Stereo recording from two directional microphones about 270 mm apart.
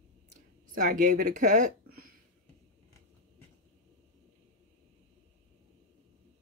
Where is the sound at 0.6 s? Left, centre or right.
Right.